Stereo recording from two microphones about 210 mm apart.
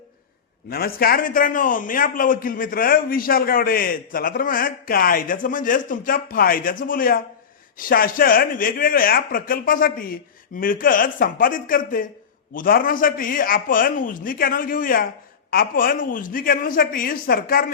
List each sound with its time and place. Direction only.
0.7 s a man's voice: 45° left (ahead or behind)